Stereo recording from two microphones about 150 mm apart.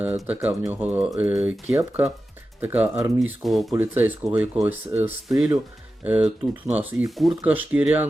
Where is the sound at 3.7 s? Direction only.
15° right (ahead or behind).